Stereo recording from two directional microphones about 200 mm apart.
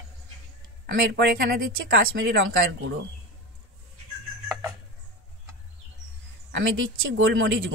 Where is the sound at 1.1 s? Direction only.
50° right (ahead or behind).